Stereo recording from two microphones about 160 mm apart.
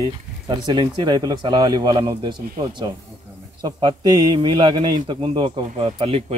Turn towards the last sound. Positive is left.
turn(degrees=-40)  # may be behind; listen again after turning